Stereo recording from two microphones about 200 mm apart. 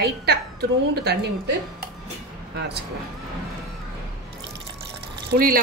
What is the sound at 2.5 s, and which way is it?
Speech, 55° right (ahead or behind).